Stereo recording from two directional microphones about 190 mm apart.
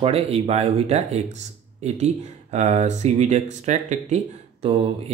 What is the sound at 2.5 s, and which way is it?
Speech, 35° right (ahead or behind).